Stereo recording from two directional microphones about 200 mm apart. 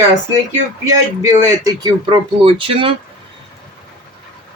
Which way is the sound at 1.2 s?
20° right (ahead or behind).